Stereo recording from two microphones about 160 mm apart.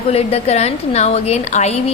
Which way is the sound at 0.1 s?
40° left (ahead or behind).